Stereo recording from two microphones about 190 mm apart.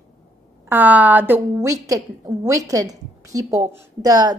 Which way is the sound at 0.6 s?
10° right (ahead or behind).